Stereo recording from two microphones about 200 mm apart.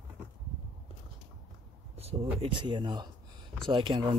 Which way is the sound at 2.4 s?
25° right (ahead or behind).